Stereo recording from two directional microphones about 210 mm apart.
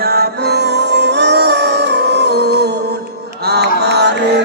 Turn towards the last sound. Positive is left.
turn(degrees=-55)  # may be behind; listen again after turning